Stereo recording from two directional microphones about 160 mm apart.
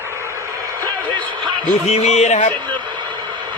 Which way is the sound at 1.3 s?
30° right (ahead or behind).